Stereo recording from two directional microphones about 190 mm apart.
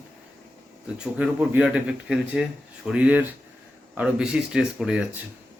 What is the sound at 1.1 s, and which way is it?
Speech, 5° right (ahead or behind).